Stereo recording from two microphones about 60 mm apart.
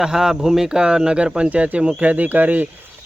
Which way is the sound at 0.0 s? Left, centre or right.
Centre.